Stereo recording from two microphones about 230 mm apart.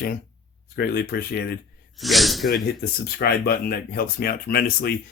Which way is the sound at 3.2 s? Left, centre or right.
Left.